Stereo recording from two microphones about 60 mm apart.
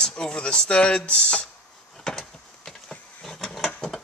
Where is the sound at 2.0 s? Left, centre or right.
Centre.